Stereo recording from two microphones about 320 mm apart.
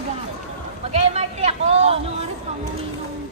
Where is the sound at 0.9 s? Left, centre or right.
Centre.